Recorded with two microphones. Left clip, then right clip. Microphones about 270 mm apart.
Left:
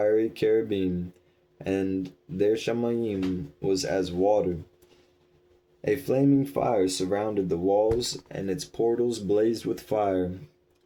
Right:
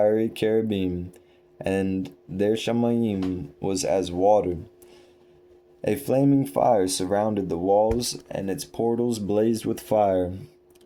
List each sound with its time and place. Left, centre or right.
0.0 s speech: right
5.8 s speech: right